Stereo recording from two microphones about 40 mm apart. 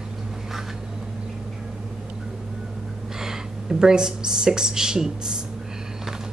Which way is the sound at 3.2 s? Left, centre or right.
Centre.